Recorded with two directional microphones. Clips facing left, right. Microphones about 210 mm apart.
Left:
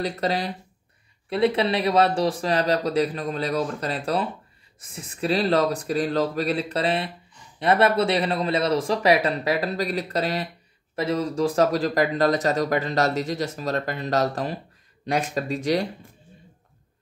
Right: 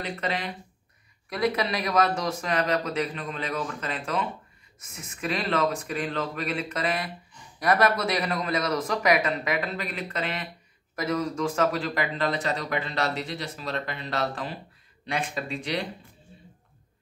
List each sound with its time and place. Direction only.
0.0 s a man's voice: 35° left (ahead or behind)